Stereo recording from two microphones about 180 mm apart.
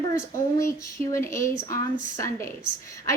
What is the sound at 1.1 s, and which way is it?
Speech, 15° left (ahead or behind).